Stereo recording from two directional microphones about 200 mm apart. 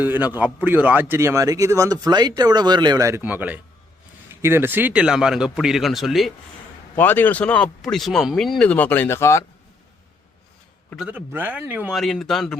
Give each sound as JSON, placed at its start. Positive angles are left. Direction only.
{"t": 0.0, "sound": "speech", "side_deg": -10}
{"t": 6.9, "sound": "speech", "side_deg": 10}
{"t": 10.8, "sound": "speech", "side_deg": 0}